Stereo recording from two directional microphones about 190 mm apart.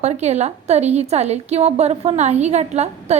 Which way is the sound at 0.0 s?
35° right (ahead or behind).